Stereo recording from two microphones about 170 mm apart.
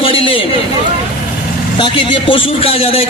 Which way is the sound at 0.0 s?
30° left (ahead or behind).